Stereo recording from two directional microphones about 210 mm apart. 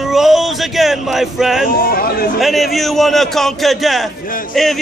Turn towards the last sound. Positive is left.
turn(degrees=0)  # may be behind; listen again after turning